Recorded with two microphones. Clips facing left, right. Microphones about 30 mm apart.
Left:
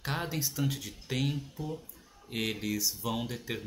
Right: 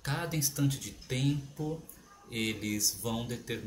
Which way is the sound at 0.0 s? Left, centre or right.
Centre.